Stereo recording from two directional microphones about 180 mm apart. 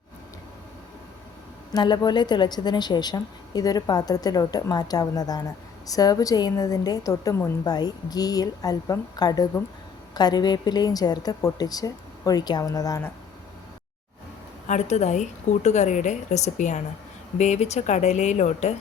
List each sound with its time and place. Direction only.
1.7 s a woman's voice: 20° left (ahead or behind)
14.7 s a woman's voice: 40° left (ahead or behind)